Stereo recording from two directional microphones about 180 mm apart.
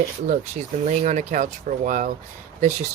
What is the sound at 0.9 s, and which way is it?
Speech, 40° right (ahead or behind).